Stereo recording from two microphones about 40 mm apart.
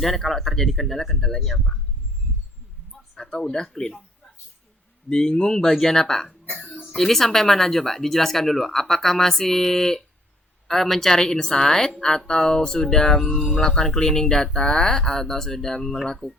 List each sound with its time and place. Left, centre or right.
0.0 s speech: centre
3.2 s speech: left
5.0 s speech: centre